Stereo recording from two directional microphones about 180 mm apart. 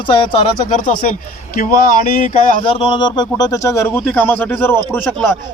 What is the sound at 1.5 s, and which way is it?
Speech, 50° left (ahead or behind).